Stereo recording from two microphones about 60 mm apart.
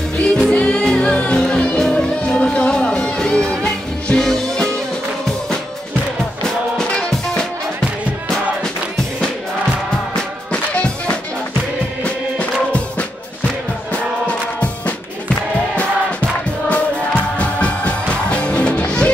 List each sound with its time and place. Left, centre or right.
0.4 s music: centre
6.4 s music: centre
10.5 s music: centre
16.6 s music: left